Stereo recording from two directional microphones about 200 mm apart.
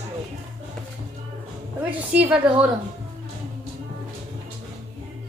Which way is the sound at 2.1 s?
5° right (ahead or behind).